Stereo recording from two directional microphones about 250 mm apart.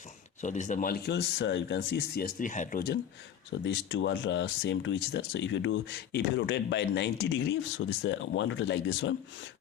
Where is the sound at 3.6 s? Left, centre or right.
Left.